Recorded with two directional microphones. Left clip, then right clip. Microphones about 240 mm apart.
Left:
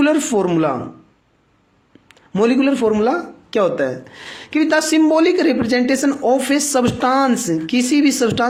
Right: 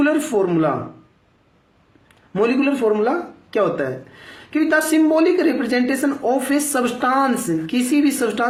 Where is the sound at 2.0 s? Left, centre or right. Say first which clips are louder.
Left 2 dB; left.